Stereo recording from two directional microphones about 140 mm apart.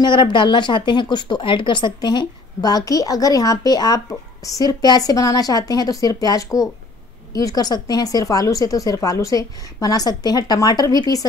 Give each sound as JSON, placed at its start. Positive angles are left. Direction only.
{"t": 0.0, "sound": "speech", "side_deg": 35}